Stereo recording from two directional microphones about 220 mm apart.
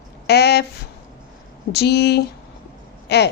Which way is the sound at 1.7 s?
50° left (ahead or behind).